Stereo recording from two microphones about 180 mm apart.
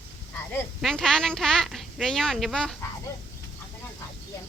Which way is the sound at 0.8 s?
Centre (ahead or behind).